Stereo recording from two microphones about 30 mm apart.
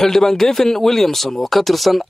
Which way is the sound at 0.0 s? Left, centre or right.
Centre.